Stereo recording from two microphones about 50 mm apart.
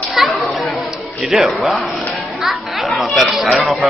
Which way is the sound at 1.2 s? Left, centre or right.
Centre.